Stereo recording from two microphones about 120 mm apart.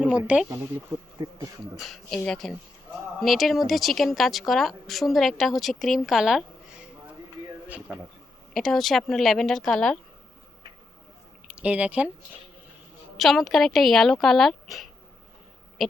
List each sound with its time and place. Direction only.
0.0 s speech: 10° right (ahead or behind)
0.4 s speech: 25° right (ahead or behind)
1.2 s speech: 35° right (ahead or behind)
1.8 s speech: 5° left (ahead or behind)
8.5 s speech: centre (ahead or behind)
11.4 s speech: 10° right (ahead or behind)
13.1 s speech: centre (ahead or behind)
15.8 s owl: centre (ahead or behind)